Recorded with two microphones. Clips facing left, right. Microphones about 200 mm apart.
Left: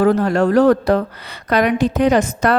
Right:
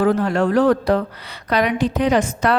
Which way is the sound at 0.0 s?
40° left (ahead or behind).